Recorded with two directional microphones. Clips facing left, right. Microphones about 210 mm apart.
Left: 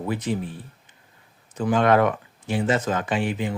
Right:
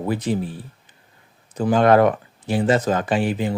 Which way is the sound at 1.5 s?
35° right (ahead or behind).